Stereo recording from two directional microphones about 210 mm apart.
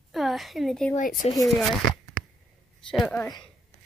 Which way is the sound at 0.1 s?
Centre (ahead or behind).